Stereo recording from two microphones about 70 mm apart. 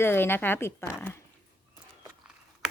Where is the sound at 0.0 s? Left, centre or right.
Left.